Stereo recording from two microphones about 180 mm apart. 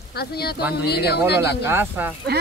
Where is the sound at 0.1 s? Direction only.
60° left (ahead or behind).